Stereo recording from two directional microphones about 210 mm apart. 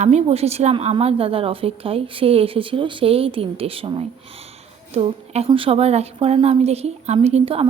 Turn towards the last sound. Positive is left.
turn(degrees=-25)  # may be behind; listen again after turning